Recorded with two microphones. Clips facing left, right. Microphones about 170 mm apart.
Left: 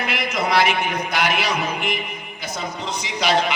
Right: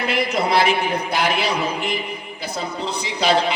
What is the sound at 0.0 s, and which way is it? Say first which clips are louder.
A man's voice: right 3 dB; 30° right (ahead or behind).